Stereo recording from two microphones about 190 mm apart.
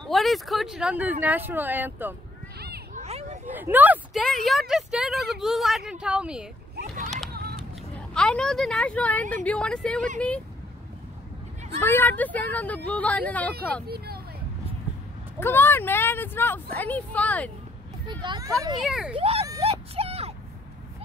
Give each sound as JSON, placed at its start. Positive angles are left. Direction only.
{"t": 0.1, "sound": "speech", "side_deg": 0}
{"t": 3.0, "sound": "a sound", "side_deg": -35}
{"t": 3.4, "sound": "a sound", "side_deg": -10}
{"t": 4.2, "sound": "speech", "side_deg": 0}
{"t": 7.2, "sound": "a sound", "side_deg": -55}
{"t": 8.1, "sound": "speech", "side_deg": 5}
{"t": 11.8, "sound": "speech", "side_deg": 10}
{"t": 13.8, "sound": "speech", "side_deg": -55}
{"t": 15.4, "sound": "speech", "side_deg": 10}
{"t": 18.0, "sound": "speech", "side_deg": -25}
{"t": 18.8, "sound": "speech", "side_deg": -5}
{"t": 19.1, "sound": "speech", "side_deg": -30}
{"t": 19.6, "sound": "a sound", "side_deg": -30}